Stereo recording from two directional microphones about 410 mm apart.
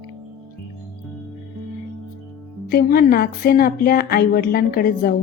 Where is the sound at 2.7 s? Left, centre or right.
Left.